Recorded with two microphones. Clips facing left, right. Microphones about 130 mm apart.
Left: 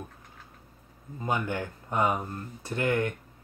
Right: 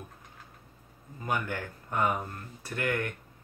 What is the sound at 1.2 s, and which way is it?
Speech, 20° left (ahead or behind).